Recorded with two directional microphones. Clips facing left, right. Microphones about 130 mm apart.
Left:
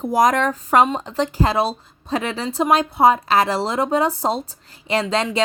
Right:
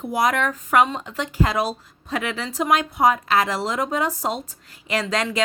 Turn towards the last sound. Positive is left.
turn(degrees=25)  # may be behind; listen again after turning